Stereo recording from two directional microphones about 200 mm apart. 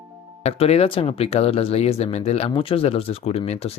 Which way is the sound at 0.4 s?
30° left (ahead or behind).